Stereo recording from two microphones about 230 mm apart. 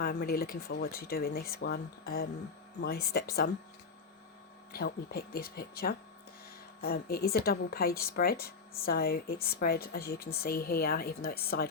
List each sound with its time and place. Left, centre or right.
0.0 s a woman's voice: left
4.7 s a woman's voice: left